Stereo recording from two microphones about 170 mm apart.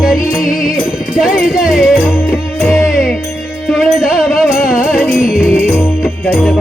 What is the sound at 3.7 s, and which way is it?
Music, centre (ahead or behind).